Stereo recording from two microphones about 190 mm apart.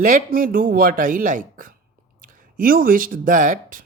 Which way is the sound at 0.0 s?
45° right (ahead or behind).